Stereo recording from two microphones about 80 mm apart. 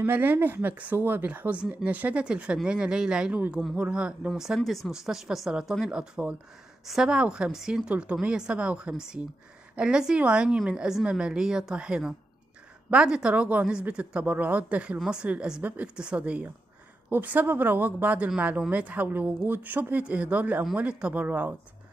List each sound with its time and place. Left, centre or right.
0.0 s speech: right
3.3 s speech: right